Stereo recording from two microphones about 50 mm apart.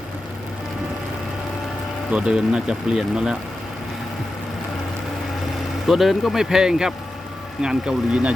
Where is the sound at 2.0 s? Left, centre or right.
Right.